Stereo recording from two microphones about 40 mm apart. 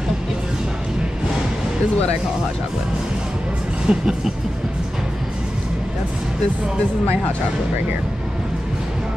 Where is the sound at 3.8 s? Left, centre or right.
Centre.